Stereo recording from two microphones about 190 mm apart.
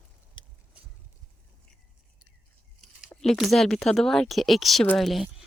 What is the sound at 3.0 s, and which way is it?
Speech, centre (ahead or behind).